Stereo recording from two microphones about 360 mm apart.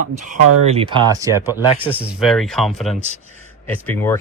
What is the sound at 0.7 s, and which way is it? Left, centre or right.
Speech, centre.